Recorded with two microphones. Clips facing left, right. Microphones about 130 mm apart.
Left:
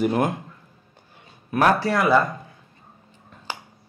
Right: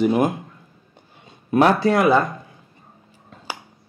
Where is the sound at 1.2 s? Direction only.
25° right (ahead or behind).